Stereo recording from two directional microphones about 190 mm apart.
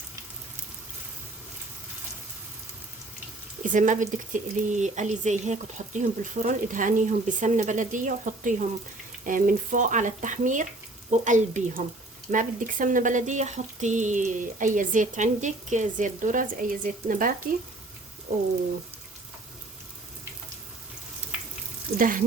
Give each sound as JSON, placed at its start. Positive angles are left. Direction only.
{"t": 3.6, "sound": "speech", "side_deg": -40}
{"t": 9.2, "sound": "frying", "side_deg": -45}
{"t": 11.2, "sound": "speech", "side_deg": -40}
{"t": 21.9, "sound": "frying", "side_deg": -45}